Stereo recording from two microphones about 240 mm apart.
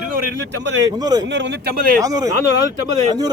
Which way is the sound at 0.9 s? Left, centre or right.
Centre.